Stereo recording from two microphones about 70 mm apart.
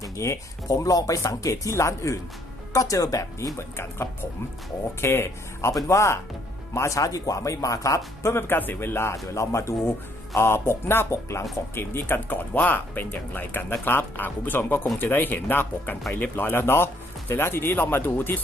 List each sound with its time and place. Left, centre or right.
0.0 s speech: left
3.8 s speech: left